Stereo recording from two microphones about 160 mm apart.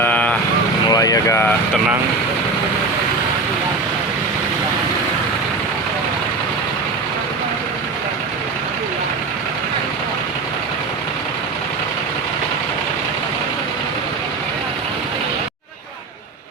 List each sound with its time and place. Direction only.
0.0 s vehicle: 10° left (ahead or behind)
0.9 s speech: 20° left (ahead or behind)